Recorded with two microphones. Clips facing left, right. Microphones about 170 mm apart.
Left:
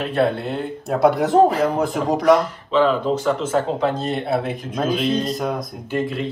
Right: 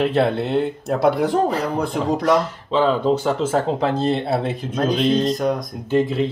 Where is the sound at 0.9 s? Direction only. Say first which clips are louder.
Left 3 dB; centre (ahead or behind).